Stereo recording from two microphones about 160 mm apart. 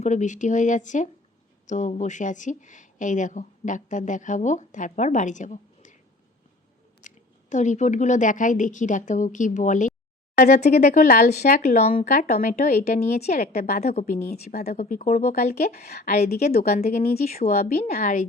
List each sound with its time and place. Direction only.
0.0 s speech: 50° left (ahead or behind)
7.0 s a sound: 50° left (ahead or behind)
7.5 s speech: 50° left (ahead or behind)
10.8 s a woman's voice: 65° left (ahead or behind)
14.7 s speech: 60° left (ahead or behind)